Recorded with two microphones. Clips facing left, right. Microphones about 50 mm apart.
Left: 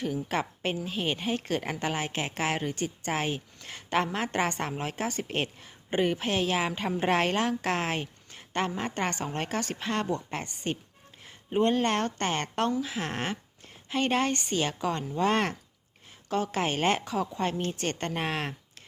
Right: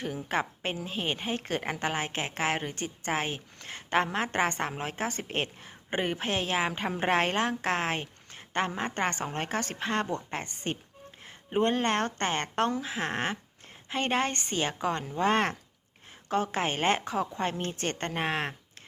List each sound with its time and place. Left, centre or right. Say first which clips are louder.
0.0 s a woman's voice: left 1 dB; centre
18.1 s speech: right 1 dB; centre